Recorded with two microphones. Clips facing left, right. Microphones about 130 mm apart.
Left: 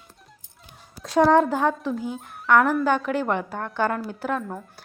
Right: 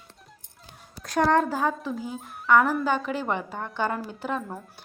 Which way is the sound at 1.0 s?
Centre (ahead or behind).